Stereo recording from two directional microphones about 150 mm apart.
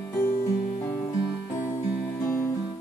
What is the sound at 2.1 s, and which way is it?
Music, 20° left (ahead or behind).